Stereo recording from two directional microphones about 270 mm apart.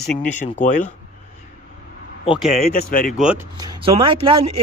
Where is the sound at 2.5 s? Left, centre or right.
Left.